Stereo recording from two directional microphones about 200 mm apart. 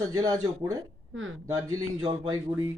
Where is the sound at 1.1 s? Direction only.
75° right (ahead or behind).